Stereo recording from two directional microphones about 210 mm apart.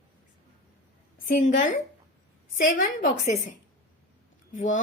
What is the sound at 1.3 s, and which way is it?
A woman's voice, 40° left (ahead or behind).